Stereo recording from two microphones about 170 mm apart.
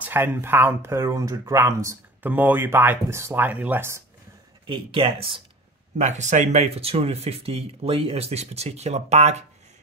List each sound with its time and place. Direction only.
0.0 s speech: 10° right (ahead or behind)
4.6 s speech: 30° right (ahead or behind)
5.9 s speech: 45° right (ahead or behind)